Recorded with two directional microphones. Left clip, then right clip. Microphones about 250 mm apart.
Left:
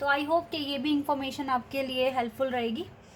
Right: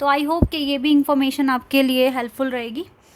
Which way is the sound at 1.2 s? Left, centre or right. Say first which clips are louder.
Right 9 dB; right.